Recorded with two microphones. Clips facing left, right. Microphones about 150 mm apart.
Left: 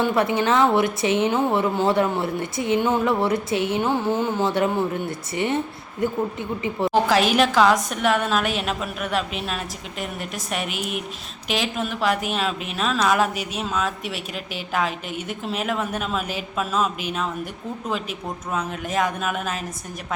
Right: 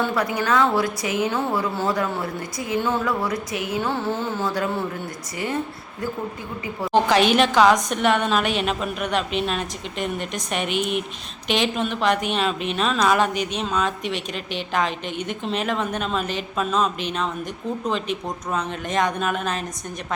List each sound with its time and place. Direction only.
0.1 s a woman's voice: 25° left (ahead or behind)
6.9 s a woman's voice: centre (ahead or behind)